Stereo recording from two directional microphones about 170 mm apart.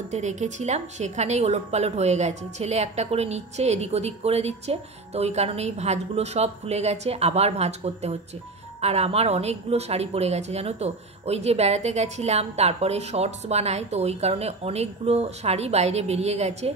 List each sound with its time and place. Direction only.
0.1 s a woman's voice: 45° right (ahead or behind)